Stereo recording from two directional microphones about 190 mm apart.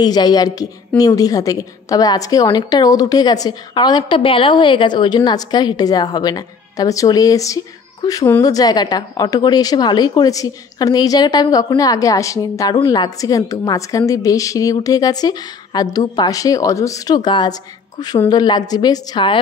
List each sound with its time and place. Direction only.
0.0 s a woman's voice: 20° left (ahead or behind)